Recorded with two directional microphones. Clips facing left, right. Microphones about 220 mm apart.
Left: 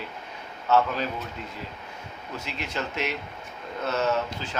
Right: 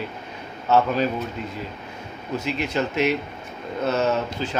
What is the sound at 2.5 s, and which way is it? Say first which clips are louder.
Speech: right 7 dB; 15° right (ahead or behind).